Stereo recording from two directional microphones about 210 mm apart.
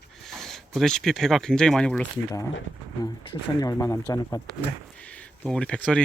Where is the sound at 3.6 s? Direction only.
15° left (ahead or behind).